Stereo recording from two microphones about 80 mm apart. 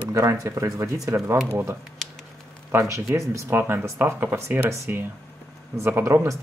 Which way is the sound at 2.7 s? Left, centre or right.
Right.